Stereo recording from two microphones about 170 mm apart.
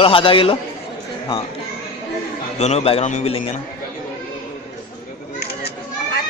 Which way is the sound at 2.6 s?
40° left (ahead or behind).